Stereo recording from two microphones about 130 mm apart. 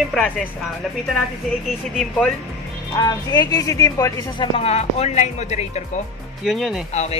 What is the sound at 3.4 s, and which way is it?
Speech, 25° left (ahead or behind).